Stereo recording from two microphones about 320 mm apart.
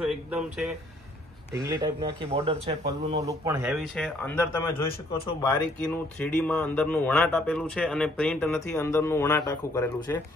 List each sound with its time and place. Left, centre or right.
0.0 s speech: centre